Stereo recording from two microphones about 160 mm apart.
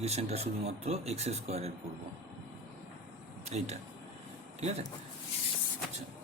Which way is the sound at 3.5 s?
45° right (ahead or behind).